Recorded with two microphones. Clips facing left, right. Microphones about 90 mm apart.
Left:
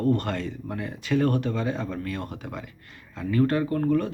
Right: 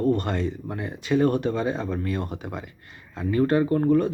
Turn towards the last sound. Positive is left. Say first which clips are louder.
# right 4 dB
turn(degrees=-20)  # may be behind; listen again after turning